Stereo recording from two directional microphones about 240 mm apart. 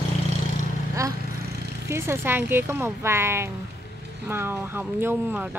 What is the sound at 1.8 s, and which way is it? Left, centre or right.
Speech, centre.